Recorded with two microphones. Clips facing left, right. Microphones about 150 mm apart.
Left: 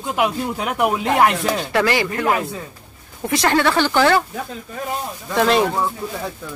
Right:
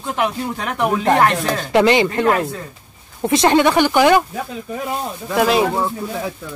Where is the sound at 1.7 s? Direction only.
20° right (ahead or behind).